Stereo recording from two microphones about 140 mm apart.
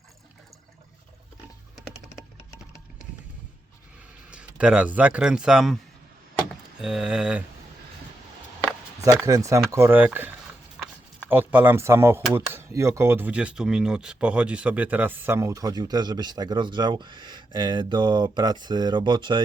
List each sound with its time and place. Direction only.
4.3 s speech: 5° right (ahead or behind)
6.7 s speech: 5° right (ahead or behind)
9.0 s speech: 25° right (ahead or behind)